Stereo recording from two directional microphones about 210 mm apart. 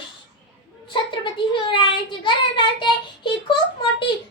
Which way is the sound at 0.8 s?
25° left (ahead or behind).